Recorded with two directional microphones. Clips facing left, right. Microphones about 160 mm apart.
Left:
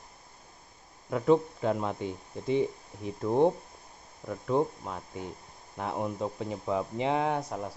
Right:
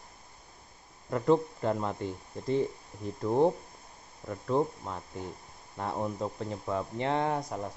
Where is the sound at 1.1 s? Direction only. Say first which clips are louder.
Left 1 dB; 5° left (ahead or behind).